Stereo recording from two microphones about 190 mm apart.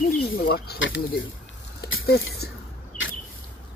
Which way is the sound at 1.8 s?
75° left (ahead or behind).